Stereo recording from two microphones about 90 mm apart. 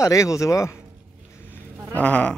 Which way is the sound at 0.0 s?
35° left (ahead or behind).